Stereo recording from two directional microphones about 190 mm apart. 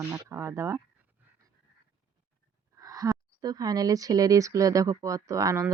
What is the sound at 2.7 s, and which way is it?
A woman's voice, 20° right (ahead or behind).